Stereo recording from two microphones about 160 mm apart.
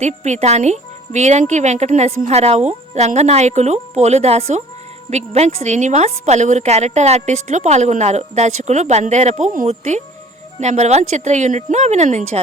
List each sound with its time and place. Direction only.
0.0 s a woman's voice: 45° right (ahead or behind)